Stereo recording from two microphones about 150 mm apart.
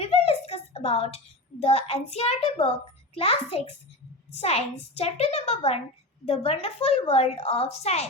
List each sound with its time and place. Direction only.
0.0 s a woman's voice: 40° left (ahead or behind)